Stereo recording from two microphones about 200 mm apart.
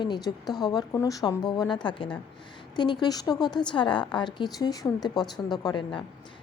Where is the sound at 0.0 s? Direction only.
20° left (ahead or behind).